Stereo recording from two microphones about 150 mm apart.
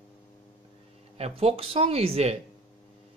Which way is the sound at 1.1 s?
40° right (ahead or behind).